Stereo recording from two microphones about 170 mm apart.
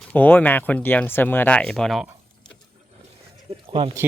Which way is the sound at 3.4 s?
30° right (ahead or behind).